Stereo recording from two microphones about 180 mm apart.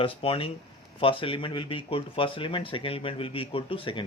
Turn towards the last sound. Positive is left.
turn(degrees=30)  # may be behind; listen again after turning